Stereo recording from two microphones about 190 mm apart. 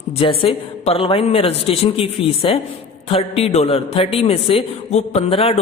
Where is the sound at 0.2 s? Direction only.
30° left (ahead or behind).